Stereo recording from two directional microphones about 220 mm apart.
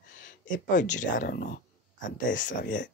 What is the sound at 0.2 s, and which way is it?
Speech, 35° left (ahead or behind).